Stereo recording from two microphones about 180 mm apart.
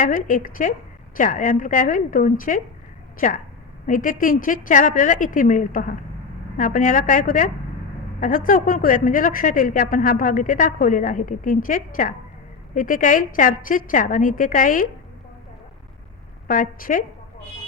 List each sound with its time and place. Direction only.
0.0 s a woman's voice: 45° left (ahead or behind)
16.5 s a woman's voice: 50° left (ahead or behind)